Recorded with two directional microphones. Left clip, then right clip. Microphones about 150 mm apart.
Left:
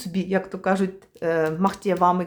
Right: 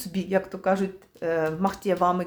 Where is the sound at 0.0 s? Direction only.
20° left (ahead or behind).